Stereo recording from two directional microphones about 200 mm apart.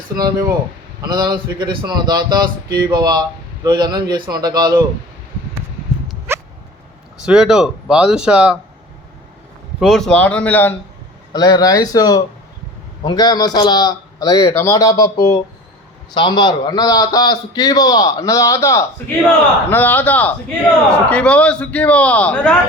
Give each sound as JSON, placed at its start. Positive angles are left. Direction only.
{"t": 0.2, "sound": "speech", "side_deg": -20}
{"t": 6.3, "sound": "a sound", "side_deg": -10}
{"t": 7.3, "sound": "speech", "side_deg": -5}
{"t": 9.8, "sound": "a man's voice", "side_deg": 0}
{"t": 11.3, "sound": "a man's voice", "side_deg": 20}